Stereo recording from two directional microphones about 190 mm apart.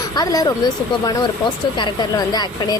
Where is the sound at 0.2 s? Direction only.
20° left (ahead or behind).